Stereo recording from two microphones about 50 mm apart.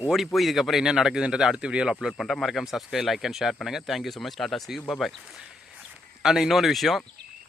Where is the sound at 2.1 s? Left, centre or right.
Centre.